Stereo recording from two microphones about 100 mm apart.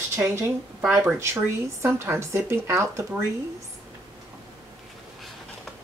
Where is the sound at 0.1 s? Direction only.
30° right (ahead or behind).